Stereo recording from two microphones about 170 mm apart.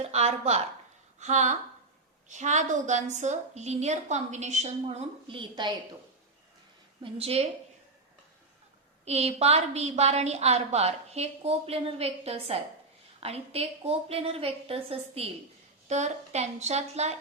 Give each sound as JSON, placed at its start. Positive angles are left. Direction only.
{"t": 0.0, "sound": "a woman's voice", "side_deg": -40}
{"t": 7.0, "sound": "a woman's voice", "side_deg": -35}
{"t": 9.0, "sound": "a woman's voice", "side_deg": -40}